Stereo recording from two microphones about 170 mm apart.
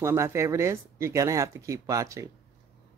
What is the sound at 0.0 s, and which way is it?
Speech, 15° right (ahead or behind).